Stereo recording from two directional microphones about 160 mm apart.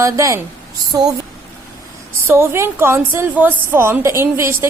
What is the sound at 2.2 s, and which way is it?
A woman's voice, 15° right (ahead or behind).